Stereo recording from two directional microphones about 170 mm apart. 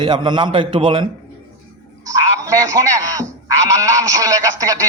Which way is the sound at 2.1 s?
20° right (ahead or behind).